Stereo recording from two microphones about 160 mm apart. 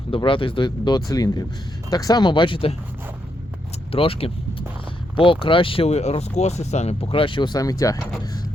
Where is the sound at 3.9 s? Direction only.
35° left (ahead or behind).